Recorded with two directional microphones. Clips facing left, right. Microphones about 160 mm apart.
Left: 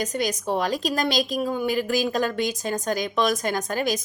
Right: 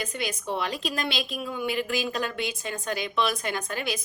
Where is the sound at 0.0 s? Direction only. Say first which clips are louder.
Left 6 dB; 40° left (ahead or behind).